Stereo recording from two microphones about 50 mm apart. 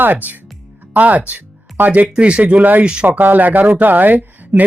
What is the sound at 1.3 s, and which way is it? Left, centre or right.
Music, right.